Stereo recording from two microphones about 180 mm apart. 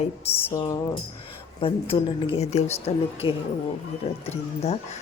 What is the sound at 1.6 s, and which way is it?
A woman's voice, 30° left (ahead or behind).